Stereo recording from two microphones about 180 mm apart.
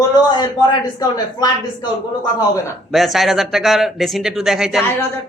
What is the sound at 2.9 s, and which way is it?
Speech, centre (ahead or behind).